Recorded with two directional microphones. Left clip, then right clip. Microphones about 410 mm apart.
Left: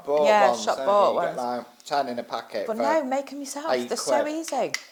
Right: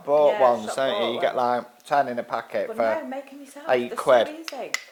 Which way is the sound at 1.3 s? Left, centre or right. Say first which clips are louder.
Right 6 dB; right.